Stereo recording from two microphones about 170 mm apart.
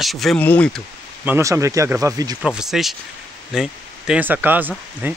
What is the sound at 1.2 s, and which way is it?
Speech, 15° right (ahead or behind).